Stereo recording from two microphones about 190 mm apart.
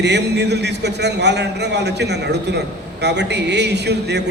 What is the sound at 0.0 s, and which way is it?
A man's voice, 65° right (ahead or behind).